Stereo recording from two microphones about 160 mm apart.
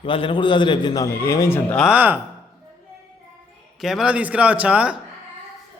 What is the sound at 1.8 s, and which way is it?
Speech, 10° right (ahead or behind).